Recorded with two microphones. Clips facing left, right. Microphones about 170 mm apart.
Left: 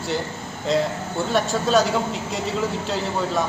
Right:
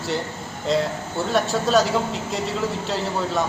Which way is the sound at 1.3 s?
Centre (ahead or behind).